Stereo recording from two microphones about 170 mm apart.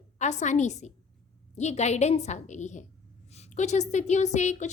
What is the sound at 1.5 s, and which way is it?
A woman's voice, 40° left (ahead or behind).